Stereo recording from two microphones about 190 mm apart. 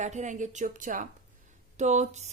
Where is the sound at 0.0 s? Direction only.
40° right (ahead or behind).